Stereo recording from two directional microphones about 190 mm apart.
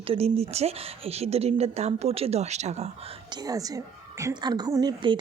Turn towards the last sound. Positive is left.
turn(degrees=-25)  # may be behind; listen again after turning